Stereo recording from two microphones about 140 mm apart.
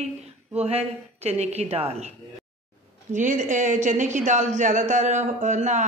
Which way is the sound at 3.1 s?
60° right (ahead or behind).